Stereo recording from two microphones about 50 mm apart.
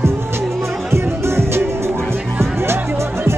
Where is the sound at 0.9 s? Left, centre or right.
Right.